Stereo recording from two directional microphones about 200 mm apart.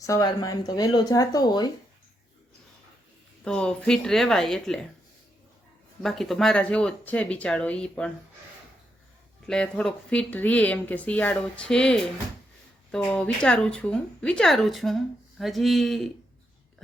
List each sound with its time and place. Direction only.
0.0 s speech: 15° left (ahead or behind)
3.4 s speech: 5° left (ahead or behind)
6.0 s speech: centre (ahead or behind)
9.5 s speech: 5° left (ahead or behind)